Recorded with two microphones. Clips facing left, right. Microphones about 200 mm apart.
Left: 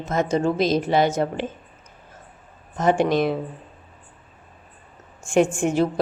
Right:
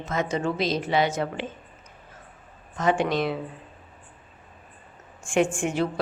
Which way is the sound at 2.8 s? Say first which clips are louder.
Left 4 dB; 45° left (ahead or behind).